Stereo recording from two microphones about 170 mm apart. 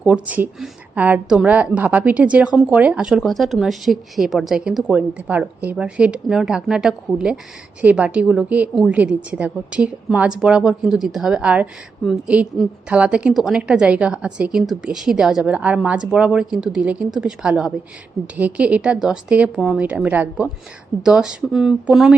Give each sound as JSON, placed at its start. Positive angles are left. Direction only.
{"t": 0.0, "sound": "a woman's voice", "side_deg": -10}